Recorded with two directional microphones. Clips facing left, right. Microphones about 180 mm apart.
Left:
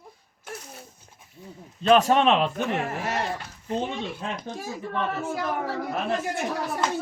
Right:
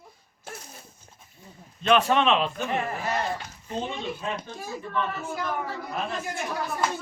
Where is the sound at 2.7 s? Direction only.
75° left (ahead or behind).